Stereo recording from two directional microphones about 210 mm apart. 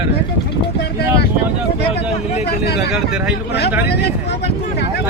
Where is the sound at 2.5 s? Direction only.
50° left (ahead or behind).